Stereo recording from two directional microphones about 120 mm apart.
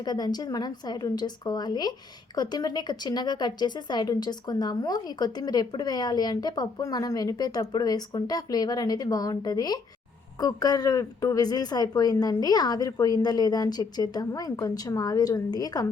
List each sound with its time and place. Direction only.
0.0 s a woman's voice: 35° left (ahead or behind)